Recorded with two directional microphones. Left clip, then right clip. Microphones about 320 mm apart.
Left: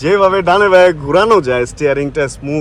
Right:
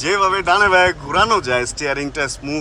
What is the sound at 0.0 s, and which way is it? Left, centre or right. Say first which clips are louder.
Speech: left 6 dB; centre.